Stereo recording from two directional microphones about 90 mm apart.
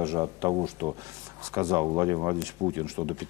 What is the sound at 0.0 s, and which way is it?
Speech, 35° right (ahead or behind).